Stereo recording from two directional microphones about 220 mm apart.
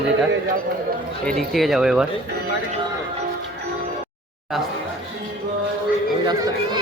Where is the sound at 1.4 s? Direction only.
Centre (ahead or behind).